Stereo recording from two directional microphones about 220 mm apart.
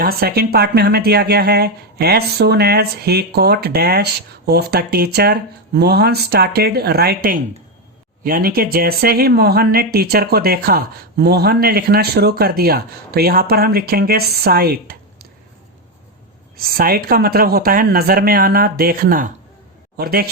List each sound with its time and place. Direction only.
0.0 s speech: 45° right (ahead or behind)
16.6 s speech: 40° right (ahead or behind)